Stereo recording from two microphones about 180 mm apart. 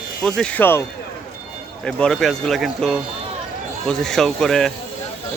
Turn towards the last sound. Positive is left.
turn(degrees=5)  # may be behind; listen again after turning